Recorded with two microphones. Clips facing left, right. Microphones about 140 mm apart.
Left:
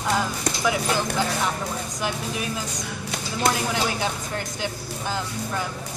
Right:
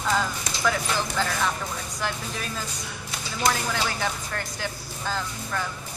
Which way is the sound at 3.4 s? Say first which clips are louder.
Left 2 dB; 20° left (ahead or behind).